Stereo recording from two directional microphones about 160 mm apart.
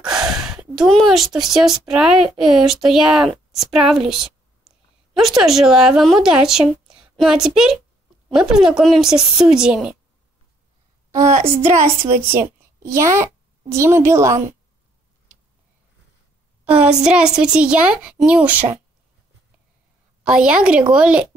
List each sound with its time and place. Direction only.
0.0 s a sound: 5° right (ahead or behind)
1.5 s speech: 5° right (ahead or behind)
11.1 s a sound: 20° right (ahead or behind)
12.3 s a woman's voice: 15° right (ahead or behind)
16.8 s a woman's voice: 5° right (ahead or behind)
20.2 s a woman's voice: 5° right (ahead or behind)